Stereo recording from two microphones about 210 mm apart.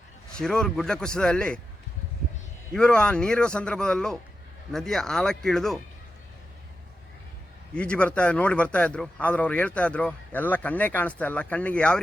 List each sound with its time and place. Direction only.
0.3 s a man's voice: 5° left (ahead or behind)
2.7 s a man's voice: 5° left (ahead or behind)
7.7 s a man's voice: 5° left (ahead or behind)